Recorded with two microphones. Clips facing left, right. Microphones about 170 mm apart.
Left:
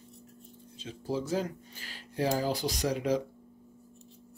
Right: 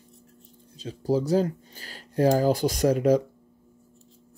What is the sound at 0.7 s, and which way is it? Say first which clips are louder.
Speech: right 9 dB; 40° right (ahead or behind).